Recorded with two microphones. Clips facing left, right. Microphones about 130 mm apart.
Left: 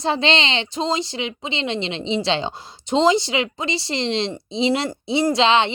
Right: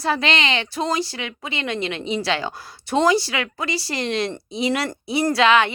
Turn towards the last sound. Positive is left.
turn(degrees=25)  # may be behind; listen again after turning